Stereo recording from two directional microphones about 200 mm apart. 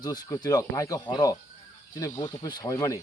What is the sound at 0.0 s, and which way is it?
Speech, 20° left (ahead or behind).